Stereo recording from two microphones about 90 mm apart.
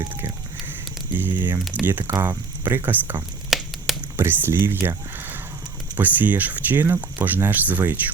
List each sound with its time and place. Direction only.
1.2 s speech: 20° right (ahead or behind)
3.5 s a sound: centre (ahead or behind)
4.2 s speech: 25° right (ahead or behind)